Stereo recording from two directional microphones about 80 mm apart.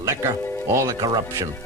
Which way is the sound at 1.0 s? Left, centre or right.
Right.